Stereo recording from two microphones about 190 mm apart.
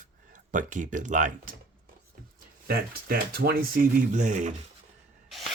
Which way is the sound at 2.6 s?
50° right (ahead or behind).